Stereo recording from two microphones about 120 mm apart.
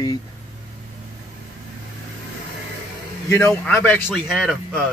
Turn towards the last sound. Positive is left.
turn(degrees=0)  # may be behind; listen again after turning